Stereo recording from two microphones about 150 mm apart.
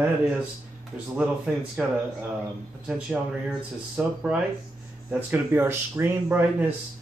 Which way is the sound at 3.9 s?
5° right (ahead or behind).